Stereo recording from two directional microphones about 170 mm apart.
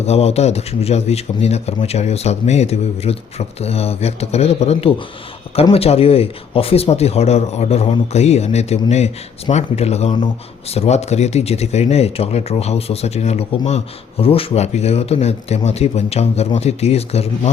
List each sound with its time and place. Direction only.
0.0 s speech: 40° left (ahead or behind)